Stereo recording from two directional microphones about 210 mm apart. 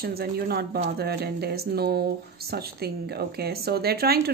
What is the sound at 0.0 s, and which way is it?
Speech, 45° right (ahead or behind).